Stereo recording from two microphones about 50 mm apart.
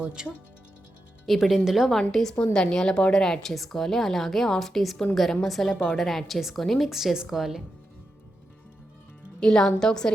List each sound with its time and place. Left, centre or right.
0.0 s speech: centre
1.3 s a woman's voice: centre
1.9 s a woman's voice: centre
9.4 s speech: centre